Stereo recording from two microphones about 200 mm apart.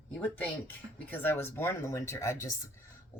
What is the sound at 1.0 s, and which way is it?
Speech, 10° left (ahead or behind).